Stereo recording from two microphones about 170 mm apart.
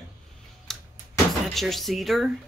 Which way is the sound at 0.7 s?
Centre (ahead or behind).